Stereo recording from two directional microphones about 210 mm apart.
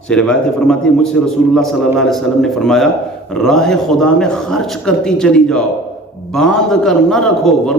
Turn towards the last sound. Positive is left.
turn(degrees=0)  # may be behind; listen again after turning